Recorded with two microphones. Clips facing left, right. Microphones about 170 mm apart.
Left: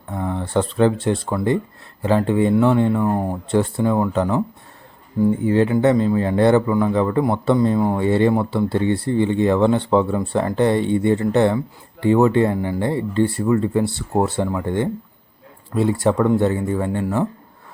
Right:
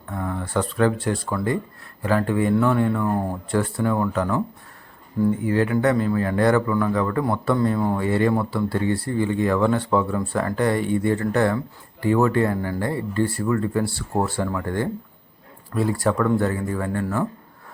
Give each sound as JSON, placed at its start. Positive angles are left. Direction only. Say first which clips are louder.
{"t": 0.1, "sound": "speech", "louder": "left 4 dB", "side_deg": 20}
{"t": 5.5, "sound": "speech", "louder": "left 5 dB", "side_deg": 25}